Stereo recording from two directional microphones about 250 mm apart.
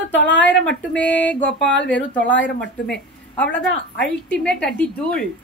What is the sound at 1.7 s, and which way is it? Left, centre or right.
Speech, left.